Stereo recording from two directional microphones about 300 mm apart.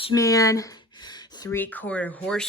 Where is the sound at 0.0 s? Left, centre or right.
Centre.